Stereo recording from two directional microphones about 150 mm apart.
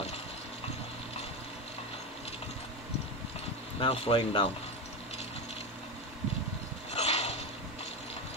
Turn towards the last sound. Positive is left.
turn(degrees=45)  # may be behind; listen again after turning